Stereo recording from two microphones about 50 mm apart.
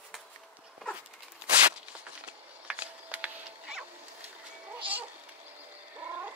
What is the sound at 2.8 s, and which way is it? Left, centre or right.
Cat, right.